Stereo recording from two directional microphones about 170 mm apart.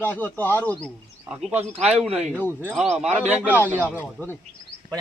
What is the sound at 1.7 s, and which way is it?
Speech, 35° right (ahead or behind).